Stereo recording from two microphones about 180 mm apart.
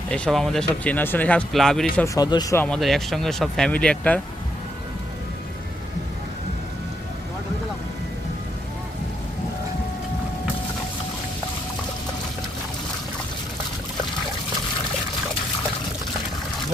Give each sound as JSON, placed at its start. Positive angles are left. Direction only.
{"t": 0.1, "sound": "speech", "side_deg": 0}
{"t": 2.1, "sound": "speech", "side_deg": 20}
{"t": 2.6, "sound": "speech", "side_deg": 0}